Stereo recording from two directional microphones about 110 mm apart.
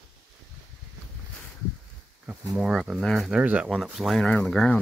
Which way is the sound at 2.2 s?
5° right (ahead or behind).